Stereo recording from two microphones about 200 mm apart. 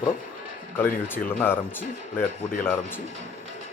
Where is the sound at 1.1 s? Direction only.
10° left (ahead or behind).